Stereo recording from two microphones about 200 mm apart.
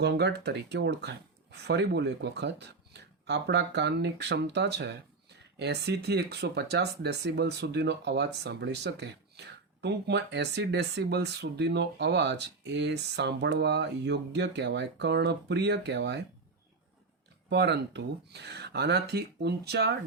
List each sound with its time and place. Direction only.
0.0 s speech: 55° right (ahead or behind)
17.5 s speech: 60° right (ahead or behind)